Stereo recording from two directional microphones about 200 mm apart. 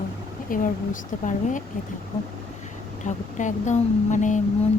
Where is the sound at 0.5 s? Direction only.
45° left (ahead or behind).